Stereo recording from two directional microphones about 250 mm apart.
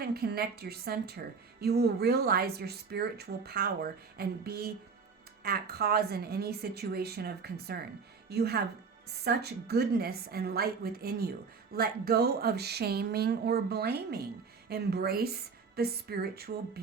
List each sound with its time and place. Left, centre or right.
0.0 s speech: right